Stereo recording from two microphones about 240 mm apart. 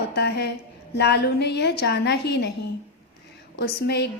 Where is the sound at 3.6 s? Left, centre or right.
Left.